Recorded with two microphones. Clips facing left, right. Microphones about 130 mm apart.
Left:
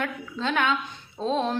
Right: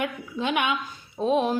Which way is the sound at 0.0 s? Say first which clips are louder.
Right 1 dB; 15° right (ahead or behind).